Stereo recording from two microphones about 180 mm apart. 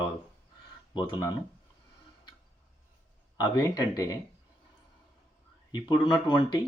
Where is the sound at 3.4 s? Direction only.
20° left (ahead or behind).